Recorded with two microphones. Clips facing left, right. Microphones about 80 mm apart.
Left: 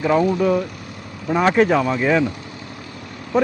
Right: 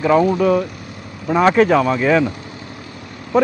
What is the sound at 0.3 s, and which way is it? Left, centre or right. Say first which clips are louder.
Speech: right 2 dB; right.